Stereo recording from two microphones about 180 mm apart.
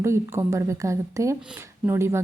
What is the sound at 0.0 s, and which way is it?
Speech, 15° right (ahead or behind).